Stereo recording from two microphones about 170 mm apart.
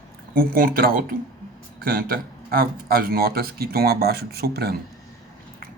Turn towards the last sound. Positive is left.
turn(degrees=-70)  # may be behind; listen again after turning